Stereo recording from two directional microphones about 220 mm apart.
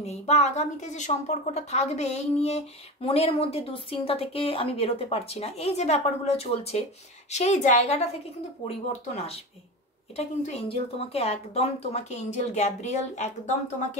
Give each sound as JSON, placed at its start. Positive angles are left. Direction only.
{"t": 0.0, "sound": "a woman's voice", "side_deg": 30}